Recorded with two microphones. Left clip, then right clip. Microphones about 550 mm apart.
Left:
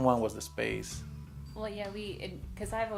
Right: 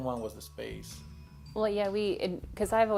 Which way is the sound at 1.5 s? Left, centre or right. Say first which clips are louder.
Right 9 dB; right.